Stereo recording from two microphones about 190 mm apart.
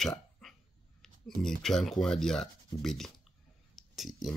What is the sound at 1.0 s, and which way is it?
Speech, centre (ahead or behind).